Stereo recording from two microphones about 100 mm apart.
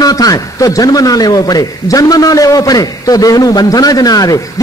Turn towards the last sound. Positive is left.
turn(degrees=40)  # may be behind; listen again after turning